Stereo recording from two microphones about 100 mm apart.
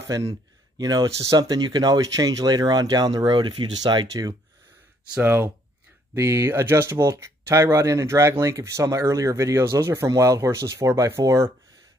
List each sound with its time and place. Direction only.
0.0 s a sound: 30° right (ahead or behind)
0.8 s speech: 40° right (ahead or behind)
5.1 s speech: 20° right (ahead or behind)